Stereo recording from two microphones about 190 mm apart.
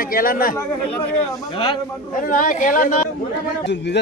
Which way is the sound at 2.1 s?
45° left (ahead or behind).